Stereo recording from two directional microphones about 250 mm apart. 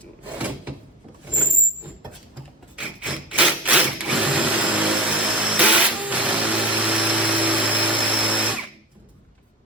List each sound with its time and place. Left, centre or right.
0.3 s drawer open or close: centre
1.3 s vehicle: centre
2.7 s a sound: centre